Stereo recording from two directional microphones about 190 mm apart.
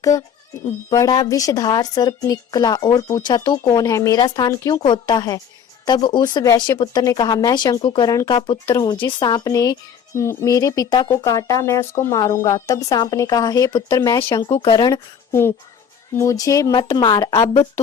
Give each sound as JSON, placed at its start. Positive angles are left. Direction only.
{"t": 0.9, "sound": "a woman's voice", "side_deg": 20}